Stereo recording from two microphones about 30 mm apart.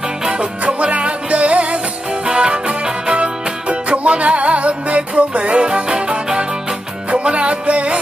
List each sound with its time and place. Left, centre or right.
0.4 s music: right
2.2 s music: right
7.1 s music: right